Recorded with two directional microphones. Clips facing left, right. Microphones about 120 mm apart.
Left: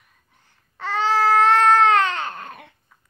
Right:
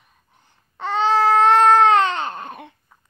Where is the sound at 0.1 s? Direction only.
20° right (ahead or behind).